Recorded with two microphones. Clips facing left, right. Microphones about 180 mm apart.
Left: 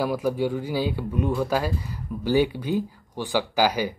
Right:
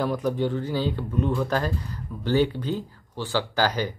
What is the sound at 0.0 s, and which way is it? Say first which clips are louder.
Speech: left 1 dB; 10° left (ahead or behind).